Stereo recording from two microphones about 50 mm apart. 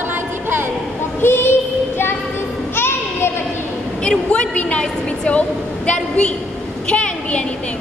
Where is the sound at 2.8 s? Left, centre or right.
Left.